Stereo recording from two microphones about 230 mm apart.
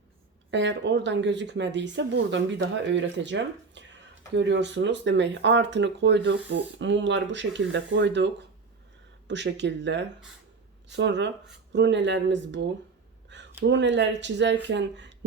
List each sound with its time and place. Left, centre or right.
0.5 s speech: right
13.7 s speech: right